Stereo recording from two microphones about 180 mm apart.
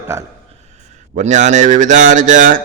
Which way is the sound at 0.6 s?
40° right (ahead or behind).